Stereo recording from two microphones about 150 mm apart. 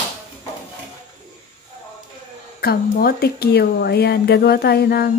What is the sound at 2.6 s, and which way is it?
A woman's voice, 90° left.